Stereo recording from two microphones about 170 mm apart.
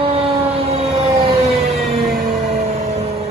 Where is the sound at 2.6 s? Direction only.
40° right (ahead or behind).